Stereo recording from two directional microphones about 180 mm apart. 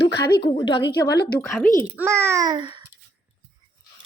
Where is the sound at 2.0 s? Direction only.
15° right (ahead or behind).